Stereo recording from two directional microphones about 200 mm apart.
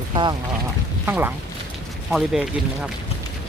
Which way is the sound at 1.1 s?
10° right (ahead or behind).